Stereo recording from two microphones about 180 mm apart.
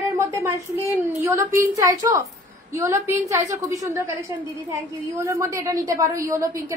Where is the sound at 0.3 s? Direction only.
15° right (ahead or behind).